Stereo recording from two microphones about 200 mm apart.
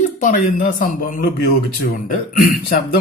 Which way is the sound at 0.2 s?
40° left (ahead or behind).